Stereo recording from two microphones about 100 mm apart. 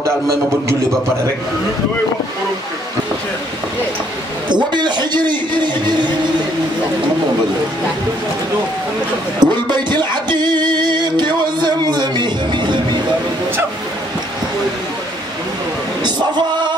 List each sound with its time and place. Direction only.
4.7 s a man's voice: 50° right (ahead or behind)
9.4 s music: 50° right (ahead or behind)
16.0 s a sound: 45° right (ahead or behind)